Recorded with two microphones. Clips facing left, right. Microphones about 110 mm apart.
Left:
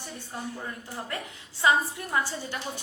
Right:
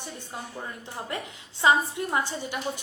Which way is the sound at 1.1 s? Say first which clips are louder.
Right 2 dB; 20° right (ahead or behind).